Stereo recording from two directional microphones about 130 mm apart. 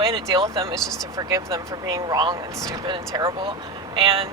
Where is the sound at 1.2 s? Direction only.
25° right (ahead or behind); by 4.2 s 45° right (ahead or behind).